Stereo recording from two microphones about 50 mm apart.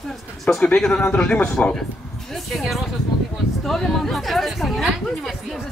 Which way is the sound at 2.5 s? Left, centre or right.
Centre.